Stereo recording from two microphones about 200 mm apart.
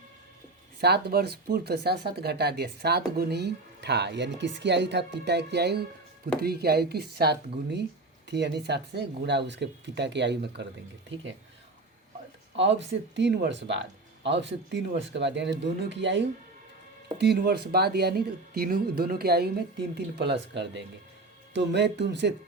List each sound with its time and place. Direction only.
0.8 s speech: 55° right (ahead or behind)
12.5 s speech: 65° right (ahead or behind)